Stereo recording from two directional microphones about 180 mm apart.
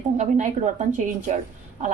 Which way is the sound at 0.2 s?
40° right (ahead or behind).